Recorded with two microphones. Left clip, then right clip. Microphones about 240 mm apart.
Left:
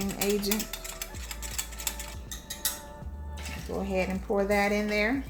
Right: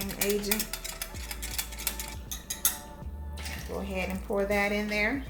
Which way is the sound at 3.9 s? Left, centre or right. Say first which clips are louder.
Left 3 dB; left.